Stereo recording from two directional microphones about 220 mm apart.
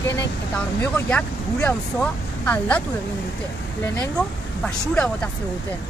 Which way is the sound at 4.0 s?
5° left (ahead or behind).